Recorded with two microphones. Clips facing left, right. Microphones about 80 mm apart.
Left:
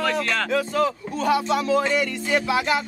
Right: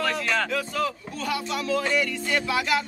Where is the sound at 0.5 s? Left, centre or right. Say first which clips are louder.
Left 5 dB; left.